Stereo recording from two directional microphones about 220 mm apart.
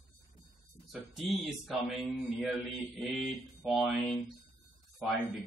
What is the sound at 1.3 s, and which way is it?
A man's voice, centre (ahead or behind).